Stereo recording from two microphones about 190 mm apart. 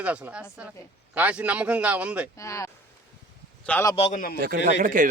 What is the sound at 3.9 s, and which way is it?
Speech, 30° left (ahead or behind).